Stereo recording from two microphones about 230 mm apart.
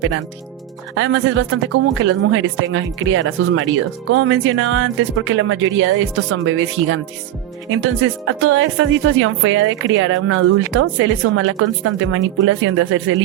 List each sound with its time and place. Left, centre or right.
0.9 s speech: right